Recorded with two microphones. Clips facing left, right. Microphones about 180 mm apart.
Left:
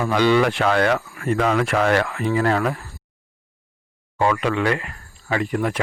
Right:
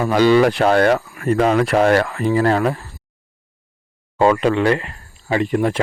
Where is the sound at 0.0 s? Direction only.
40° right (ahead or behind).